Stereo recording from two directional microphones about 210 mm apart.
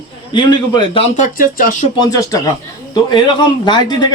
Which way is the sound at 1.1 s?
40° left (ahead or behind).